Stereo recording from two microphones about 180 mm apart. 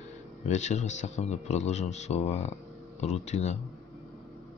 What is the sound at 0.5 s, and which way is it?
Speech, 40° left (ahead or behind).